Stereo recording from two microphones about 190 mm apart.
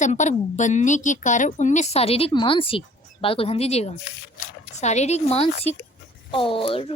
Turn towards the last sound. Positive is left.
turn(degrees=30)  # may be behind; listen again after turning